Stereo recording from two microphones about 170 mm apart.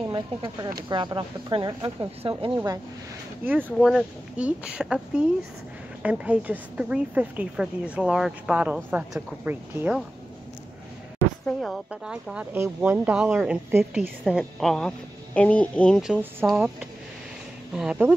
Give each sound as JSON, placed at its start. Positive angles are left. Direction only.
{"t": 0.0, "sound": "speech", "side_deg": -25}
{"t": 3.4, "sound": "a woman's voice", "side_deg": -10}
{"t": 11.4, "sound": "a woman's voice", "side_deg": 0}
{"t": 16.1, "sound": "a woman's voice", "side_deg": -10}
{"t": 17.7, "sound": "a woman's voice", "side_deg": -5}